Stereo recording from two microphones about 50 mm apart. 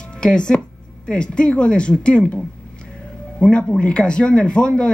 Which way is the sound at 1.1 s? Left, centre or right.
Centre.